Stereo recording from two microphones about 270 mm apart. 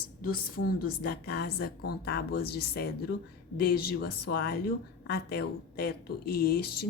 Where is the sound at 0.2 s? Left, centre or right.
Left.